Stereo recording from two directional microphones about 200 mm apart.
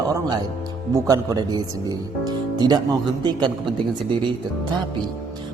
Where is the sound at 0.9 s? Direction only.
20° right (ahead or behind).